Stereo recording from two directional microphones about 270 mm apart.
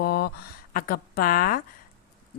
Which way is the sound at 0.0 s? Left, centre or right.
Left.